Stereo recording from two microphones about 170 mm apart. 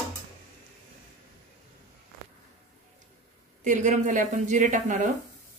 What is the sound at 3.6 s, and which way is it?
Speech, 45° right (ahead or behind).